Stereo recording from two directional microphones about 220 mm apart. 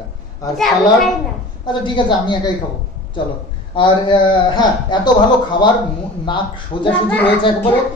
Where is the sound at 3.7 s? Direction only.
20° left (ahead or behind).